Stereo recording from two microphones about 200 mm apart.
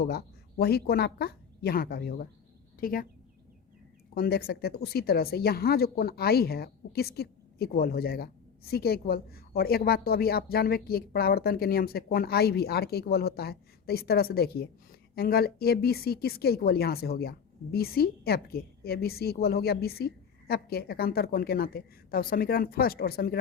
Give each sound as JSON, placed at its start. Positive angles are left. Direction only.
{"t": 0.0, "sound": "speech", "side_deg": 50}
{"t": 4.1, "sound": "speech", "side_deg": 50}